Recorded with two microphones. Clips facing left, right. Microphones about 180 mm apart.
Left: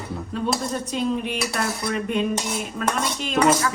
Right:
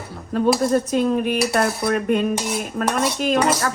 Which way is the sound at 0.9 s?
50° right (ahead or behind).